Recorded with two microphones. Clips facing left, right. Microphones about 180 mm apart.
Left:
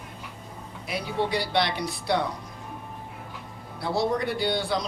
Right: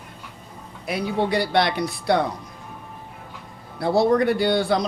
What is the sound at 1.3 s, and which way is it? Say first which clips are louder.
Speech: right 5 dB; 55° right (ahead or behind).